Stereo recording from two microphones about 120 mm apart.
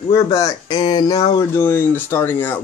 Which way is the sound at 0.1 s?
25° left (ahead or behind).